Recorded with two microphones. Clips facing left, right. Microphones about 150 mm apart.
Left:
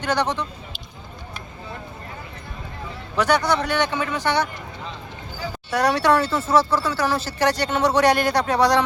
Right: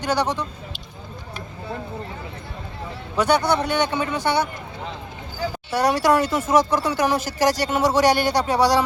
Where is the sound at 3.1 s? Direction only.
25° right (ahead or behind).